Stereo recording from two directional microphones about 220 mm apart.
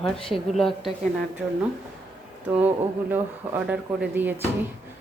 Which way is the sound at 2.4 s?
5° right (ahead or behind).